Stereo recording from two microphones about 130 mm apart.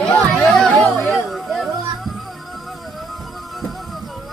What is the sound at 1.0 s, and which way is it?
Music, centre (ahead or behind).